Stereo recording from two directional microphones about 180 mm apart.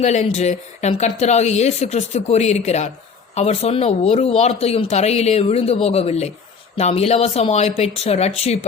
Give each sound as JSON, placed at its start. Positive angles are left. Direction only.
{"t": 0.0, "sound": "speech", "side_deg": 40}